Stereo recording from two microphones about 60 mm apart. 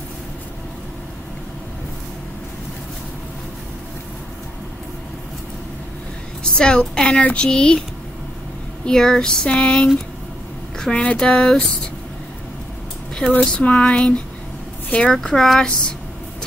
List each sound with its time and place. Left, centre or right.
6.4 s speech: centre
8.8 s speech: centre
13.4 s speech: centre